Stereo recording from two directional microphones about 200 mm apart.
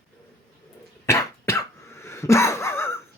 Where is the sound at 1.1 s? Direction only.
15° left (ahead or behind).